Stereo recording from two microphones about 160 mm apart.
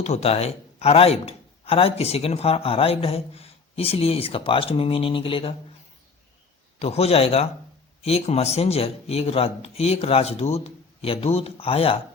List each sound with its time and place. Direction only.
0.0 s a man's voice: 40° left (ahead or behind)
6.7 s a man's voice: 40° left (ahead or behind)